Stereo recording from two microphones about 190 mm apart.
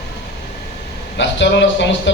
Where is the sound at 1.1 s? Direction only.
70° left (ahead or behind).